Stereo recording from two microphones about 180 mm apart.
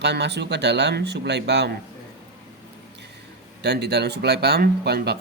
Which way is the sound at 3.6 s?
70° right (ahead or behind).